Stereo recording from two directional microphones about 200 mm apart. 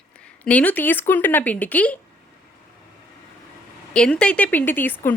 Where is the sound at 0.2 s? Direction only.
5° left (ahead or behind).